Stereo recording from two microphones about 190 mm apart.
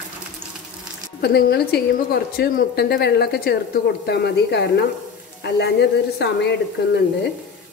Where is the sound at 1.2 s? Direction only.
55° left (ahead or behind).